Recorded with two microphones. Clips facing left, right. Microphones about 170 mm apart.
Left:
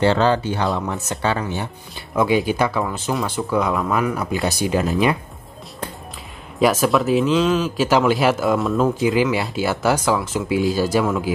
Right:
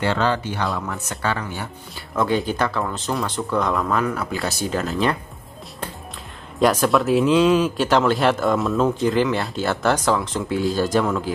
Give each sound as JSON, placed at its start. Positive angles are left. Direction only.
{"t": 0.0, "sound": "speech", "side_deg": 30}
{"t": 2.1, "sound": "speech", "side_deg": 10}
{"t": 6.6, "sound": "speech", "side_deg": 5}